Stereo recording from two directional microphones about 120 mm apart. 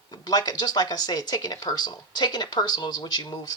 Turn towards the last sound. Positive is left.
turn(degrees=35)  # may be behind; listen again after turning